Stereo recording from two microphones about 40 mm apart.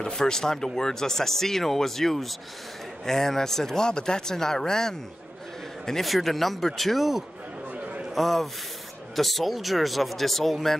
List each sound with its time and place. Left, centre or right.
0.0 s speech: centre
5.9 s speech: centre
7.7 s a sound: right
8.1 s speech: centre